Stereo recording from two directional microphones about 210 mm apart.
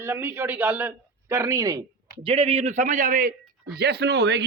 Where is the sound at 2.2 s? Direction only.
30° right (ahead or behind).